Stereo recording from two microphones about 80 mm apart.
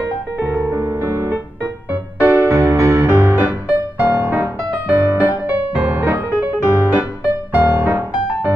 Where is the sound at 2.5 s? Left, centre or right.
Right.